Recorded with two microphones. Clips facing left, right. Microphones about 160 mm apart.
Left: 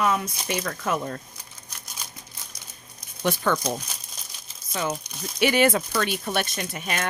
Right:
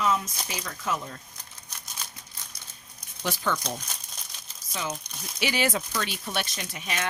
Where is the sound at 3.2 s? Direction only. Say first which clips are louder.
Left 5 dB; 55° left (ahead or behind).